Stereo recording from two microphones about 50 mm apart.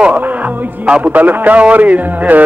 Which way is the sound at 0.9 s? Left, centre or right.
Right.